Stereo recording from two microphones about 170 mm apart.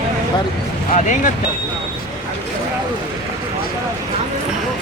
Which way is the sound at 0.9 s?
45° left (ahead or behind).